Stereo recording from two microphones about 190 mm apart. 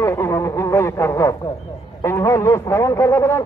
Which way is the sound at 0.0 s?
15° left (ahead or behind).